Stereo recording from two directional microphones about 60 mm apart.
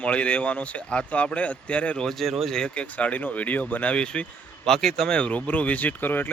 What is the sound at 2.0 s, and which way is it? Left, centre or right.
Speech, centre.